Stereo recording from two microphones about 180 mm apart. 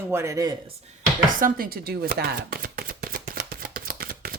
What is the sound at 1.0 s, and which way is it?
Chopping, 50° right (ahead or behind).